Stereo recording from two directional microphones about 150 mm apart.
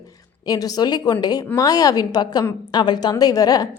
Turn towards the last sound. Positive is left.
turn(degrees=25)  # may be behind; listen again after turning